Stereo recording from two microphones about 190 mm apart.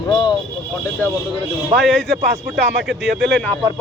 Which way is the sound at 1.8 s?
Centre (ahead or behind).